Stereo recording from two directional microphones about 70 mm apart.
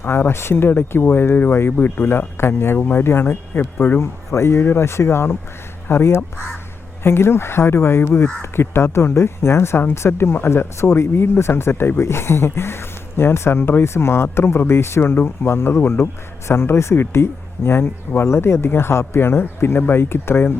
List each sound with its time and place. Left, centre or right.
0.0 s speech: left